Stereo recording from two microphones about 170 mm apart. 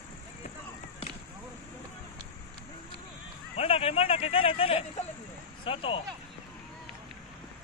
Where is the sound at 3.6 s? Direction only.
35° left (ahead or behind).